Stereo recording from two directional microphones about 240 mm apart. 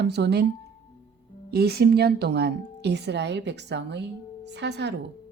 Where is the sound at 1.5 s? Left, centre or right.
Right.